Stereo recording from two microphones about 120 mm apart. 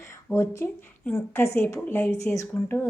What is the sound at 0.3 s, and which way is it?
A woman's voice, 20° left (ahead or behind).